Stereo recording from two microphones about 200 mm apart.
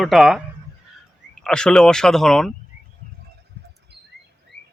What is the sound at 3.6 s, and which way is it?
Rodents, 55° right (ahead or behind).